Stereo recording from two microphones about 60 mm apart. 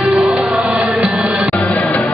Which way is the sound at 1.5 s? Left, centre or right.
Left.